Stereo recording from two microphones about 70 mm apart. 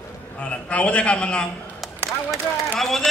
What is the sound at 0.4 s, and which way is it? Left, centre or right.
A man's voice, centre.